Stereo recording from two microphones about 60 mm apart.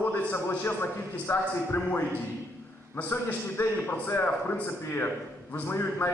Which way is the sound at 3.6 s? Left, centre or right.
Left.